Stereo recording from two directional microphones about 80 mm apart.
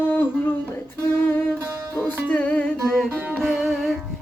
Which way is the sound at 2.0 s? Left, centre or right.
Left.